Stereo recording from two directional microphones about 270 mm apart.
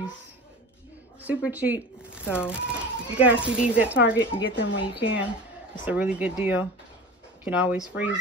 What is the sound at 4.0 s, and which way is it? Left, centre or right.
Speech, left.